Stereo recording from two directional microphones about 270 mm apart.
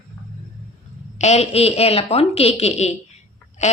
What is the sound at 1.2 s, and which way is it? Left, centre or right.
Speech, left.